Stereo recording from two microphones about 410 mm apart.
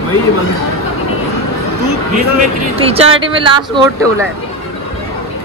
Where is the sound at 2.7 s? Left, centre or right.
Centre.